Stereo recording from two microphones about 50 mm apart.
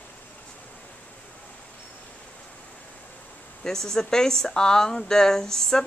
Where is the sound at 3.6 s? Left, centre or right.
Centre.